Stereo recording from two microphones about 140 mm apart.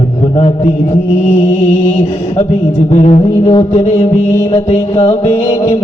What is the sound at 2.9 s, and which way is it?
Music, 55° left (ahead or behind).